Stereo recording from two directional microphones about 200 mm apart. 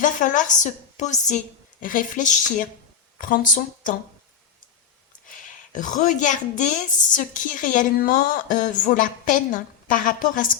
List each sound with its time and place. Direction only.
0.0 s a woman's voice: 40° left (ahead or behind)
5.3 s a woman's voice: 40° left (ahead or behind)